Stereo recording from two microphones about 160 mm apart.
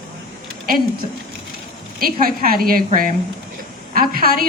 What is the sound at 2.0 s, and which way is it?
A woman's voice, 65° right (ahead or behind).